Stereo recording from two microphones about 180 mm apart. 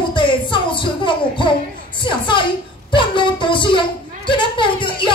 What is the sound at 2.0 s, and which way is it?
Speech, 25° left (ahead or behind).